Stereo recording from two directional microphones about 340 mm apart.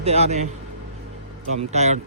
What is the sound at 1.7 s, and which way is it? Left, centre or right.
Speech, centre.